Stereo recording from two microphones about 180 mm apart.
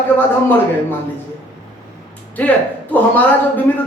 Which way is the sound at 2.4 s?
10° left (ahead or behind).